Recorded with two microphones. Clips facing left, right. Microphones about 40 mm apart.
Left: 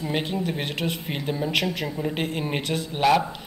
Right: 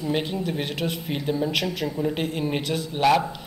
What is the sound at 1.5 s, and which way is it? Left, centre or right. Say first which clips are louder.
Speech: left 1 dB; left.